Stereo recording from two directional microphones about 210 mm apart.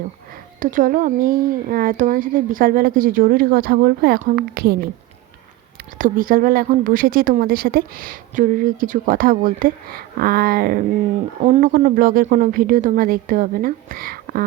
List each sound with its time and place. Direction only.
0.6 s a woman's voice: 40° right (ahead or behind)
6.0 s a woman's voice: 40° right (ahead or behind)